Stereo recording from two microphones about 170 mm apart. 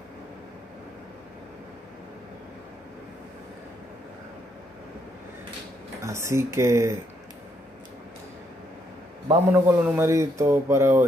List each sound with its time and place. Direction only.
6.0 s speech: 15° right (ahead or behind)
9.5 s speech: 15° right (ahead or behind)